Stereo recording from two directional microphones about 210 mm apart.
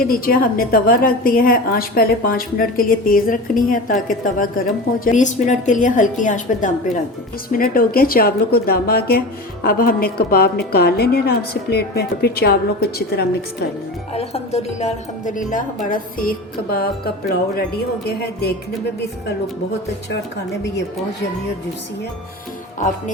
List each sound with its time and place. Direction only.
0.0 s a woman's voice: 45° left (ahead or behind)
14.1 s a woman's voice: 30° left (ahead or behind)